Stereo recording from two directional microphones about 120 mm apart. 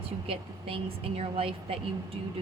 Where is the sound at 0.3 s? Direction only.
50° right (ahead or behind).